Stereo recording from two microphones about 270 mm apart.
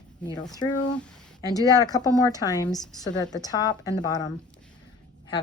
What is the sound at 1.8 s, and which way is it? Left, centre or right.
Speech, centre.